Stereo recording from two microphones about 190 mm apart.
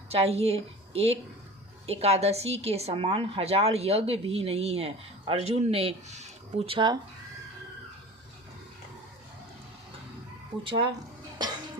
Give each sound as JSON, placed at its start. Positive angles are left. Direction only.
{"t": 0.1, "sound": "a woman's voice", "side_deg": -30}
{"t": 6.7, "sound": "speech", "side_deg": -25}
{"t": 10.6, "sound": "speech", "side_deg": -25}